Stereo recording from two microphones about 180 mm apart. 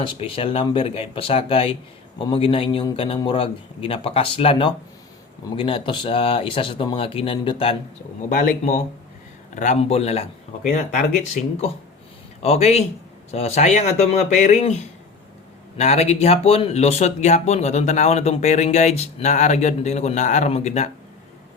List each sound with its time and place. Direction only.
0.0 s a man's voice: 30° left (ahead or behind)
8.3 s speech: 50° left (ahead or behind)
15.8 s speech: 35° left (ahead or behind)